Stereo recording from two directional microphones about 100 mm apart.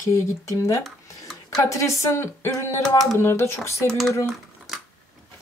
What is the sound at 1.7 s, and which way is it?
Speech, 30° left (ahead or behind).